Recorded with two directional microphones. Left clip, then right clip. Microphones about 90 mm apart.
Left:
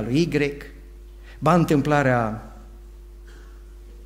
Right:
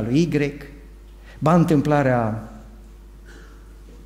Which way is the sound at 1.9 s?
30° right (ahead or behind).